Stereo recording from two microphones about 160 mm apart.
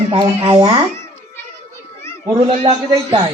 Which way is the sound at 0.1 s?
35° right (ahead or behind).